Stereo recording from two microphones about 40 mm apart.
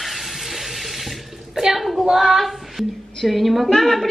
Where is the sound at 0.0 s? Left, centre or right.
Centre.